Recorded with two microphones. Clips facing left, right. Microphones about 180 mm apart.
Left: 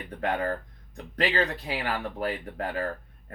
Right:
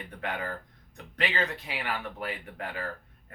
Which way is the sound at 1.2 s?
35° left (ahead or behind).